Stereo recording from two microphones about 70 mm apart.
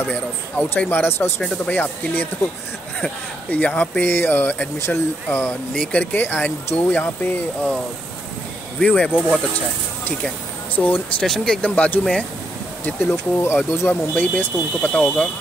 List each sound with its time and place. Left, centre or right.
0.6 s speech: left
1.4 s speech: left
3.4 s speech: left
4.7 s speech: left
5.8 s speech: centre
8.7 s speech: centre
10.8 s speech: left
11.2 s speech: centre
12.8 s speech: left
13.7 s speech: left